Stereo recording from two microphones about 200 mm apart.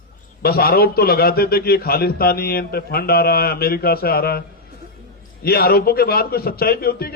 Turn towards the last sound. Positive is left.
turn(degrees=50)  # may be behind; listen again after turning